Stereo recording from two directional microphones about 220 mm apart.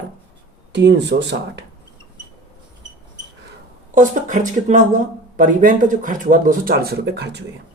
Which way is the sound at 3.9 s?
35° right (ahead or behind).